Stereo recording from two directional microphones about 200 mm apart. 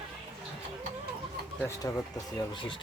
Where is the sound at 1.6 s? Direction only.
20° left (ahead or behind).